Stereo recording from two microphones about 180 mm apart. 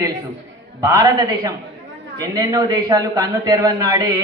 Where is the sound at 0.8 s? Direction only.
20° right (ahead or behind).